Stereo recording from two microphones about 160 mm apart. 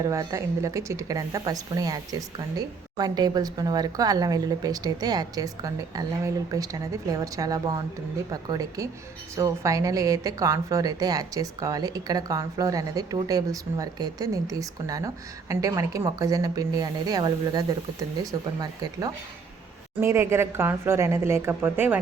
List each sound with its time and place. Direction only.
0.0 s a woman's voice: 20° right (ahead or behind)